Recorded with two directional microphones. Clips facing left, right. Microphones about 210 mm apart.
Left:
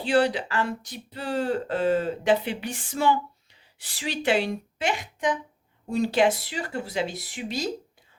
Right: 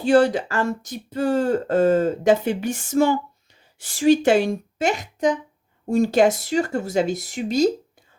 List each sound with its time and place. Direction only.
0.0 s speech: 45° right (ahead or behind)